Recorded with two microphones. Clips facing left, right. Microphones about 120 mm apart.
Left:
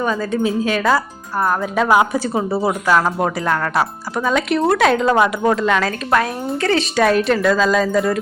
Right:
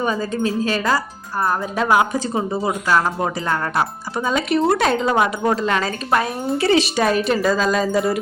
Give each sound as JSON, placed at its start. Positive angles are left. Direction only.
{"t": 0.0, "sound": "speech", "side_deg": -10}
{"t": 0.3, "sound": "speech", "side_deg": 5}
{"t": 0.8, "sound": "speech", "side_deg": -5}
{"t": 1.9, "sound": "speech", "side_deg": 10}
{"t": 4.3, "sound": "speech", "side_deg": 0}